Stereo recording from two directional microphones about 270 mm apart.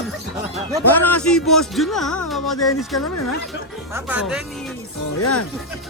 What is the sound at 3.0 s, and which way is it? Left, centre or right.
Speech, left.